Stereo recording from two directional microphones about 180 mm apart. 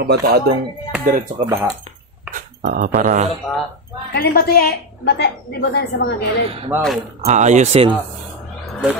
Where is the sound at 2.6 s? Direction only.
55° right (ahead or behind).